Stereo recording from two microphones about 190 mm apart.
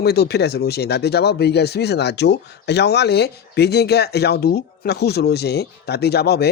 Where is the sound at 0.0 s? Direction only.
60° left (ahead or behind).